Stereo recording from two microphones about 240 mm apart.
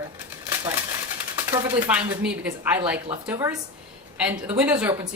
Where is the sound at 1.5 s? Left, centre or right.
Centre.